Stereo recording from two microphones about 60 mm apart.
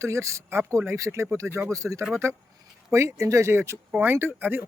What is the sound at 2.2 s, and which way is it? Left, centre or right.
Speech, right.